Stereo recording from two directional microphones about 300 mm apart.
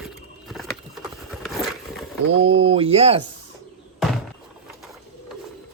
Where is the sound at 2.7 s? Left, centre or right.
Centre.